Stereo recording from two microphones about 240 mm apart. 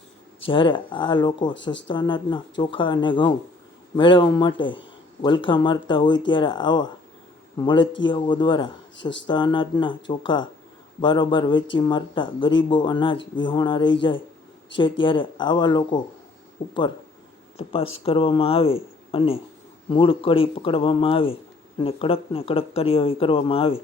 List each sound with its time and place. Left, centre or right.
0.3 s speech: left
17.6 s speech: left